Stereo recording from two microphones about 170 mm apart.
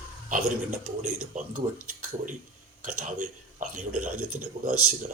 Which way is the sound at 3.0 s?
45° right (ahead or behind).